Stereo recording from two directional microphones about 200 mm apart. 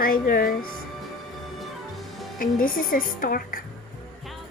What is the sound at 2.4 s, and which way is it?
A woman's voice, 45° left (ahead or behind).